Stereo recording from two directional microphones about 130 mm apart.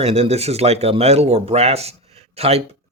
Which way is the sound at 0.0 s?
55° right (ahead or behind).